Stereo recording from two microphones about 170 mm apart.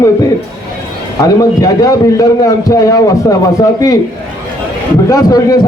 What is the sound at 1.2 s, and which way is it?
A man's voice, 20° left (ahead or behind).